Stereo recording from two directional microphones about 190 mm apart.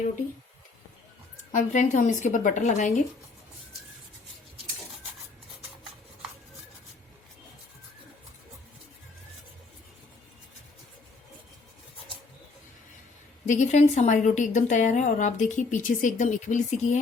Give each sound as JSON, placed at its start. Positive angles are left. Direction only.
{"t": 1.5, "sound": "a woman's voice", "side_deg": 40}
{"t": 13.4, "sound": "a woman's voice", "side_deg": 40}